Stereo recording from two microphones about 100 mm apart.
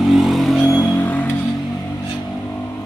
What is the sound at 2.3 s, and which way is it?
Vehicle, 15° left (ahead or behind).